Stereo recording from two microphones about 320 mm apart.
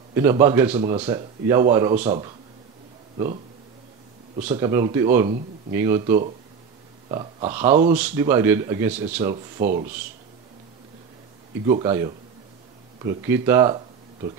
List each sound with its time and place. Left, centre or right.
0.1 s speech: centre
4.5 s speech: centre
7.8 s speech: centre
9.6 s speech: right
11.6 s speech: centre